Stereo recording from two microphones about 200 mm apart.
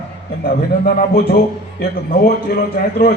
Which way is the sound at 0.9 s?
50° left (ahead or behind).